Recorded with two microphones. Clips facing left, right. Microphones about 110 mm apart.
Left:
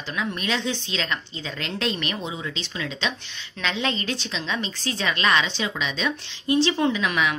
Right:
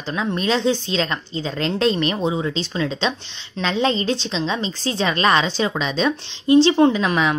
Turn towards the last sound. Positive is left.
turn(degrees=-35)  # may be behind; listen again after turning